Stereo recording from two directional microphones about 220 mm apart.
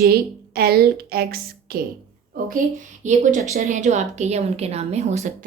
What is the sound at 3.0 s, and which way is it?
A woman's voice, 35° right (ahead or behind).